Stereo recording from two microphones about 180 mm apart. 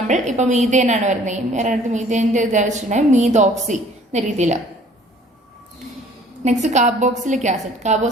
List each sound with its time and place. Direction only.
0.1 s a woman's voice: 40° right (ahead or behind)
6.4 s a woman's voice: 40° right (ahead or behind)